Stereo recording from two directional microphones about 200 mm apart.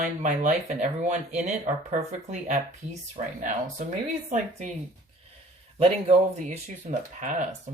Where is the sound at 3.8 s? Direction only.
40° right (ahead or behind).